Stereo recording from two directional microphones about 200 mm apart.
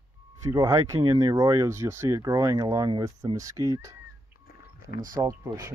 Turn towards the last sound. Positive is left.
turn(degrees=-20)  # may be behind; listen again after turning